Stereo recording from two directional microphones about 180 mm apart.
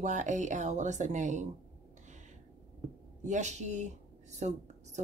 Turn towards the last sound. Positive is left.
turn(degrees=-40)  # may be behind; listen again after turning